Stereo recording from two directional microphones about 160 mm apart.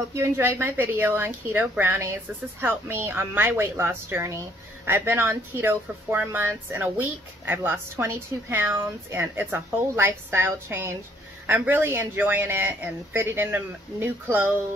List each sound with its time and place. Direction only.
0.1 s speech: 15° right (ahead or behind)